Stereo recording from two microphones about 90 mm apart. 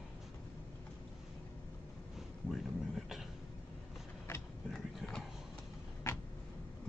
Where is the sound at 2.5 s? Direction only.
5° right (ahead or behind).